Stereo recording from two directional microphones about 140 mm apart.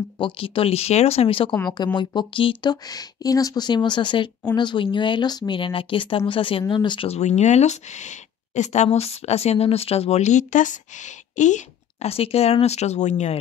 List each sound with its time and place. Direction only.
0.2 s a woman's voice: 40° left (ahead or behind)
7.1 s a woman's voice: 50° left (ahead or behind)